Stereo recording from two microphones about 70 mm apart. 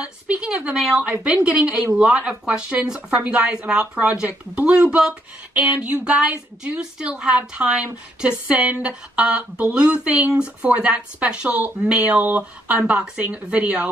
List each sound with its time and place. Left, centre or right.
0.0 s speech: centre